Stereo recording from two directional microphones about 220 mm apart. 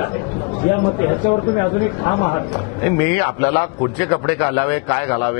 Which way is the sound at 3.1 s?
20° left (ahead or behind).